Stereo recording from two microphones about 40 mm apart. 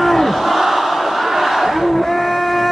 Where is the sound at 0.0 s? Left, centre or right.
Centre.